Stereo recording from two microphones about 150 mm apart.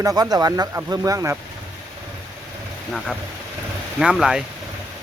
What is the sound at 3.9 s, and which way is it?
Speech, 5° right (ahead or behind).